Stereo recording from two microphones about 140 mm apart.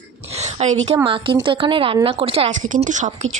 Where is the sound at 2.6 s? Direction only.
65° right (ahead or behind).